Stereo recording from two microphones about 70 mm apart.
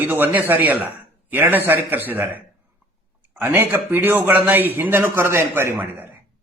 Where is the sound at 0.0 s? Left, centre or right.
Right.